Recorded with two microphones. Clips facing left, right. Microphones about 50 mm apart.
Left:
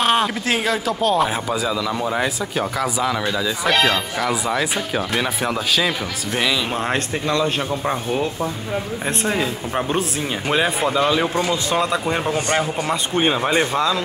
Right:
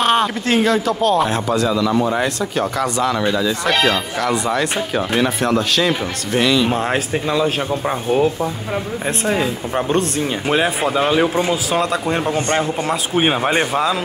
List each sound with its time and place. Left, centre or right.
0.0 s speech: centre
11.0 s a man's voice: centre
11.7 s speech: centre
13.2 s speech: centre